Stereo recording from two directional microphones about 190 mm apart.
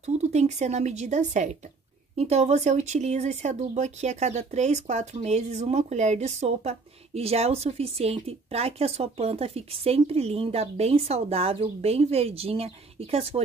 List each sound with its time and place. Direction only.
0.0 s speech: 35° right (ahead or behind)